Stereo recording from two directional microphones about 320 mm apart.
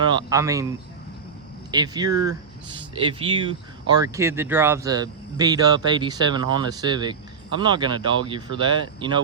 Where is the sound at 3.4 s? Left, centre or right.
Centre.